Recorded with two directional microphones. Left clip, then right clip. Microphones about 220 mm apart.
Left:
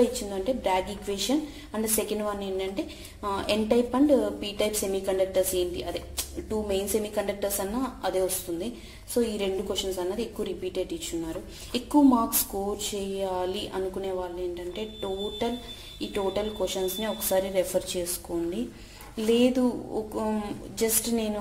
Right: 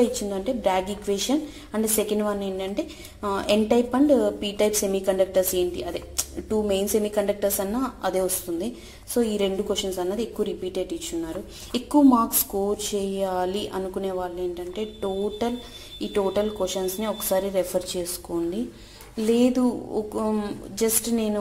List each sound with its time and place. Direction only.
0.0 s a woman's voice: 20° right (ahead or behind)